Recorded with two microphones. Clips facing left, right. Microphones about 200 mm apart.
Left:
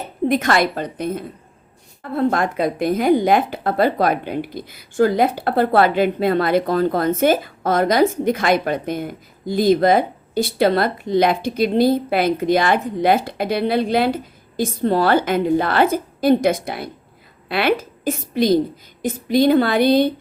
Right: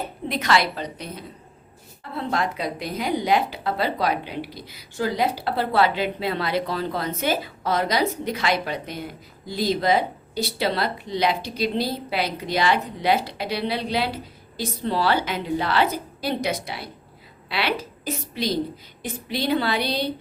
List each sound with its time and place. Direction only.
0.3 s a woman's voice: 50° left (ahead or behind)